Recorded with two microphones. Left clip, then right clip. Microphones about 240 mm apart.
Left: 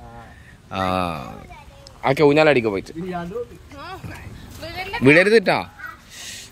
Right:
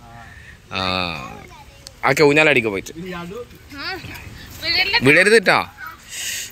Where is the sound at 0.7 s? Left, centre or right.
Centre.